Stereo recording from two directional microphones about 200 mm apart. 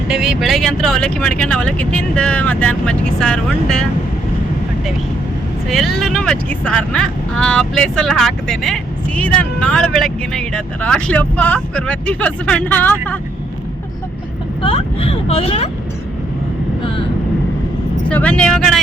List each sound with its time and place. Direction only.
0.1 s speech: centre (ahead or behind)
5.6 s speech: centre (ahead or behind)
14.6 s speech: 30° left (ahead or behind)
18.1 s speech: 5° left (ahead or behind)